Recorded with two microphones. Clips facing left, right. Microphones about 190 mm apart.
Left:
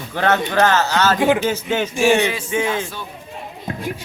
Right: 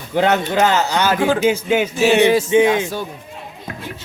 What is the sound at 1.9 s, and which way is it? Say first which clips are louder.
Music: left 1 dB; 15° left (ahead or behind).